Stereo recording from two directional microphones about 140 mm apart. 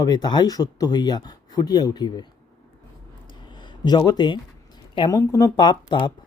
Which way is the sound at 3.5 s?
30° left (ahead or behind).